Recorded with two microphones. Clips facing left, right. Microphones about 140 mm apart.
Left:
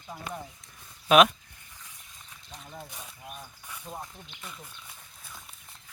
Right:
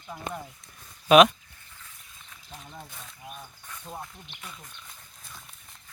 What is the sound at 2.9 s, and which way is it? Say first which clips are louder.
Speech: even; 10° left (ahead or behind).